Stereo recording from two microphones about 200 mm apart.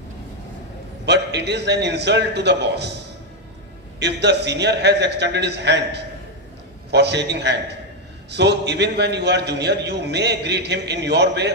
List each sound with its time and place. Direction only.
1.0 s a man's voice: 60° right (ahead or behind)
4.0 s a man's voice: 55° right (ahead or behind)